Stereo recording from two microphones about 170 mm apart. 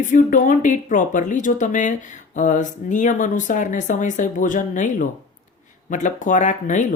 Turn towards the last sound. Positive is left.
turn(degrees=50)  # may be behind; listen again after turning